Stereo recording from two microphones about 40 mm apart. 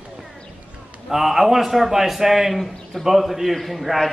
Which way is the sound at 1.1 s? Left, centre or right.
Centre.